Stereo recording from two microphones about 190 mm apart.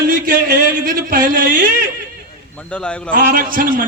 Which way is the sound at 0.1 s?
50° right (ahead or behind).